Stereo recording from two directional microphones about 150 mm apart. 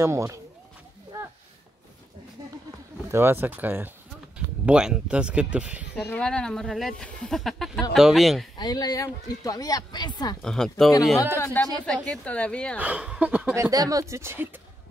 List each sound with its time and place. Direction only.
0.0 s speech: 20° right (ahead or behind)
3.1 s speech: 15° right (ahead or behind)
5.9 s speech: 10° left (ahead or behind)
8.5 s speech: 25° left (ahead or behind)
10.4 s speech: 5° left (ahead or behind)
11.3 s speech: 15° left (ahead or behind)
12.7 s speech: 10° right (ahead or behind)
13.6 s speech: 25° right (ahead or behind)